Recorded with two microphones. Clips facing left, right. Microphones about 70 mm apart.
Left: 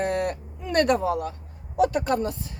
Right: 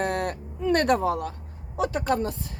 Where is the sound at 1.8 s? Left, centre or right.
Right.